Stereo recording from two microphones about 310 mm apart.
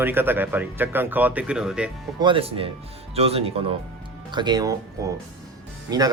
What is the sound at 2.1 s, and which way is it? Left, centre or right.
Speech, centre.